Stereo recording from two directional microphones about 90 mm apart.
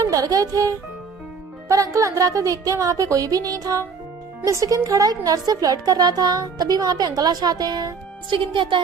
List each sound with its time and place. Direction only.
0.0 s a woman's voice: 40° right (ahead or behind)
8.3 s speech: 70° right (ahead or behind)